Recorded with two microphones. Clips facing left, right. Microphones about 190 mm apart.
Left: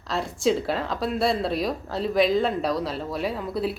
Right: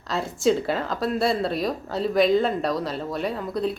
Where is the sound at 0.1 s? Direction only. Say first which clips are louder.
Right 2 dB; centre (ahead or behind).